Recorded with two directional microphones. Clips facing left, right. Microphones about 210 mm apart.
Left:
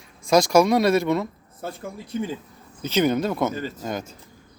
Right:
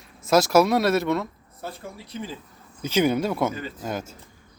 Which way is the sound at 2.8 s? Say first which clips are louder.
Left 1 dB; 10° right (ahead or behind).